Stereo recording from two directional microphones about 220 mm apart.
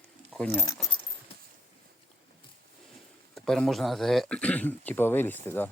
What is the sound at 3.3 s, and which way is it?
Speech, centre (ahead or behind).